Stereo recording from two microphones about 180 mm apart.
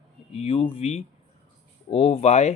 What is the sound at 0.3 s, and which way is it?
Speech, 30° left (ahead or behind).